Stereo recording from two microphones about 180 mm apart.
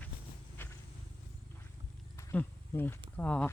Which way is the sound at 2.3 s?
10° left (ahead or behind).